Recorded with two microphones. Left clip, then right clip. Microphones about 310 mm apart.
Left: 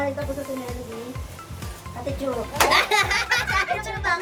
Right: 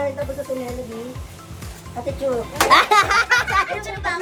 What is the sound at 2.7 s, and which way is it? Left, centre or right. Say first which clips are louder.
Speech: right 8 dB; centre.